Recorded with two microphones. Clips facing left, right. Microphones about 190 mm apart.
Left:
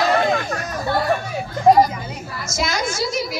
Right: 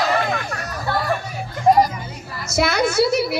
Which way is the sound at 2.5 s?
65° right (ahead or behind).